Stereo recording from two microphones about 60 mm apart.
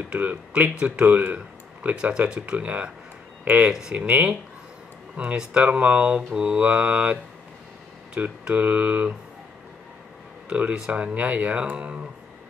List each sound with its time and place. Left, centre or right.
0.1 s speech: right
10.5 s speech: centre